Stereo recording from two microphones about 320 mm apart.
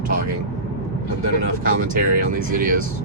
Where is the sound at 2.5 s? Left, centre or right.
Right.